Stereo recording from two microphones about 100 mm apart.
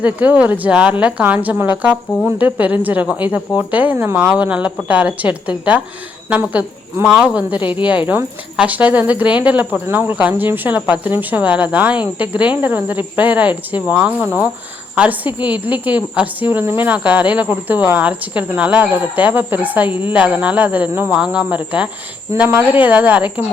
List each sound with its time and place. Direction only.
0.0 s speech: 15° right (ahead or behind)